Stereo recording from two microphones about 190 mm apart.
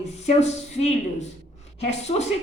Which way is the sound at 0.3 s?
35° left (ahead or behind).